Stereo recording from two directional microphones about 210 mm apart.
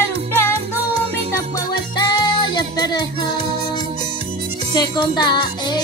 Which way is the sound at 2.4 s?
20° left (ahead or behind).